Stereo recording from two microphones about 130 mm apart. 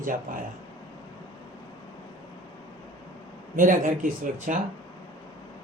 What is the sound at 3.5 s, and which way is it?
Speech, 90° right.